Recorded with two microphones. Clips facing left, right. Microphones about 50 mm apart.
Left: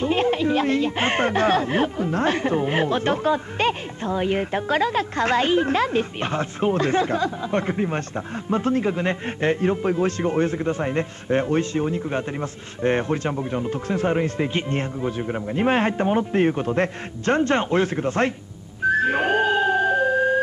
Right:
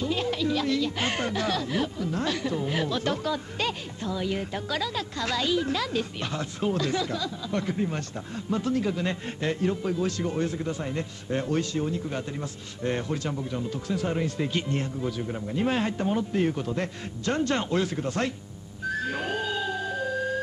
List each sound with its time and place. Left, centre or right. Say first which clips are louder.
0.0 s a man's voice: left 7 dB; left
18.9 s whistling: left 10 dB; left